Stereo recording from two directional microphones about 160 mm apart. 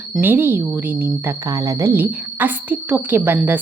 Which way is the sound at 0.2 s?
10° right (ahead or behind).